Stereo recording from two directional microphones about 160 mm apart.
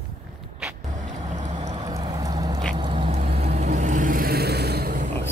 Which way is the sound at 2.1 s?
20° right (ahead or behind).